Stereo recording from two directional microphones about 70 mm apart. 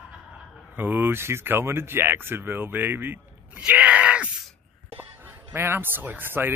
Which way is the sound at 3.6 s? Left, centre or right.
Centre.